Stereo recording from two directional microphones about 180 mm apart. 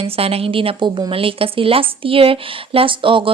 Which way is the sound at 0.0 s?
35° right (ahead or behind).